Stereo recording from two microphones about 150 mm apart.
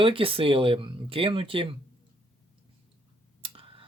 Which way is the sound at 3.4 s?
35° right (ahead or behind).